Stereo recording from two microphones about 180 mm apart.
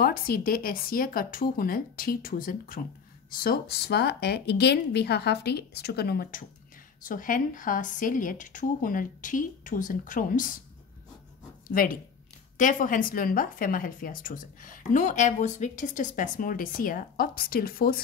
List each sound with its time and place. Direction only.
0.0 s a woman's voice: 55° left (ahead or behind)
7.0 s a woman's voice: 50° left (ahead or behind)
11.6 s a woman's voice: 50° left (ahead or behind)